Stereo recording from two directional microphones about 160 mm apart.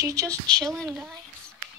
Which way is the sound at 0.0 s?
20° right (ahead or behind).